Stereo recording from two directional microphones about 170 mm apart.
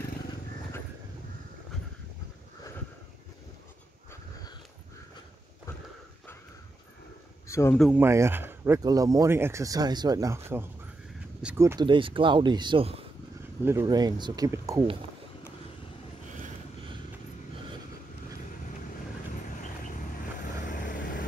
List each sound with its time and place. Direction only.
7.4 s a sound: 15° left (ahead or behind)
7.9 s speech: 15° right (ahead or behind)
11.9 s speech: 30° right (ahead or behind)
13.7 s speech: 20° right (ahead or behind)
20.6 s vehicle: 50° left (ahead or behind)